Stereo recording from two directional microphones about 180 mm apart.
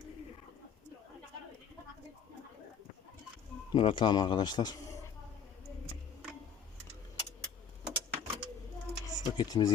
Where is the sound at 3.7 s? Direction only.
30° left (ahead or behind).